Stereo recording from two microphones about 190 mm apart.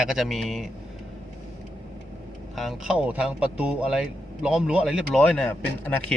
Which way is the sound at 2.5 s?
Centre (ahead or behind).